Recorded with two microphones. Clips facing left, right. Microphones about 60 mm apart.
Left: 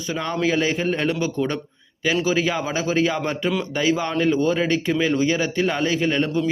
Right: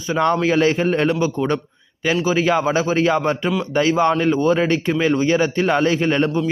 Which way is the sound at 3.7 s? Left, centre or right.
Right.